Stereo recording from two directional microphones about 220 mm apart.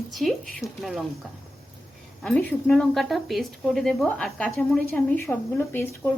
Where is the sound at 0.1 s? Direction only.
Centre (ahead or behind).